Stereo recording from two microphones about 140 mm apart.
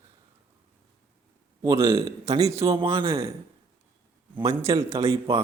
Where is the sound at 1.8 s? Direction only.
45° right (ahead or behind).